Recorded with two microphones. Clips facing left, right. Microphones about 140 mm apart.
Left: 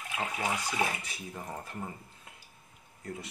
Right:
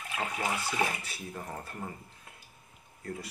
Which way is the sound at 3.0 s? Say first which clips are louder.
Right 1 dB; 20° left (ahead or behind).